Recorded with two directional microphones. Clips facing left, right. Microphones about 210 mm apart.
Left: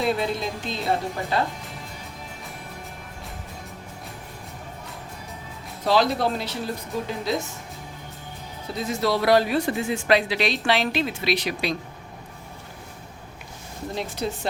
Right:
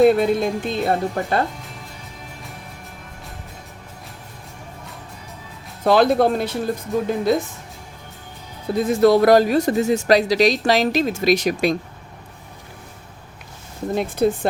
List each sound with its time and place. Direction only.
0.0 s speech: 55° right (ahead or behind)
5.8 s speech: 55° right (ahead or behind)
8.6 s speech: 55° right (ahead or behind)
13.9 s speech: 50° right (ahead or behind)